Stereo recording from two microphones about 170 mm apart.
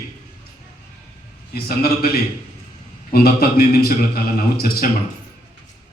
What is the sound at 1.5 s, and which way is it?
A man's voice, 65° left (ahead or behind).